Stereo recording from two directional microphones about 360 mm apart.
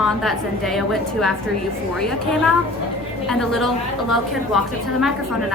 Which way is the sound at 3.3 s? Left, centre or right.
Centre.